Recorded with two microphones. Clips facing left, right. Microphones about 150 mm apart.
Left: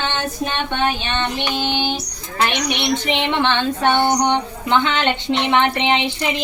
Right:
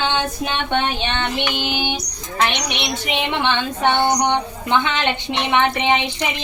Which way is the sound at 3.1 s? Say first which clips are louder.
Even; 15° right (ahead or behind).